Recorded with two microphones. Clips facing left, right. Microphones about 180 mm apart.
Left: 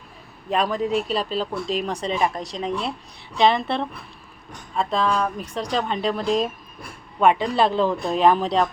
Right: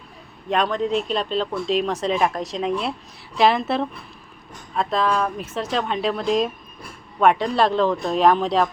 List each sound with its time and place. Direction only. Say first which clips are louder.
0.5 s speech: right 1 dB; 5° left (ahead or behind)